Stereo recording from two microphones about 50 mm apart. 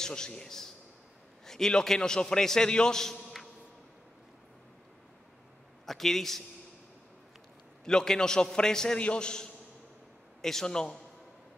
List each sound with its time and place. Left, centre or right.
0.0 s a man's voice: centre
5.9 s a man's voice: centre
7.8 s a man's voice: centre